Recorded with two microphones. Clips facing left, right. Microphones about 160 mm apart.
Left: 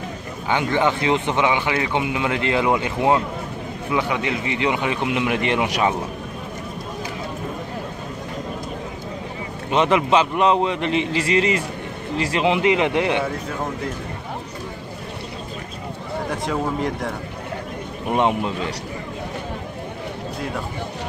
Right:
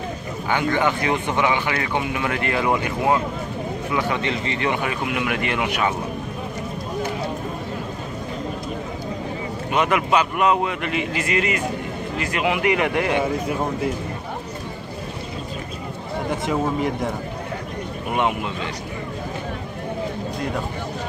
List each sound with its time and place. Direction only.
0.5 s speech: 20° left (ahead or behind)
9.7 s speech: 25° left (ahead or behind)
16.3 s a man's voice: centre (ahead or behind)
18.1 s speech: 35° left (ahead or behind)